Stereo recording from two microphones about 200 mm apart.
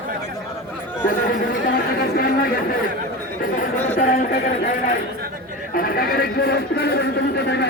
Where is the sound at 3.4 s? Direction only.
40° left (ahead or behind).